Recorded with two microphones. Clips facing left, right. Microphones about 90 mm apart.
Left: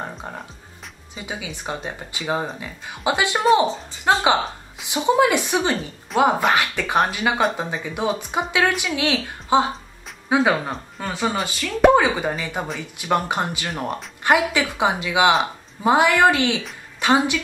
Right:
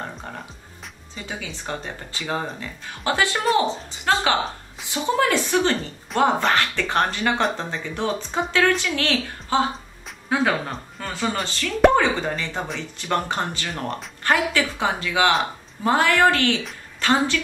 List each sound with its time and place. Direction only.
1.1 s a woman's voice: 10° left (ahead or behind)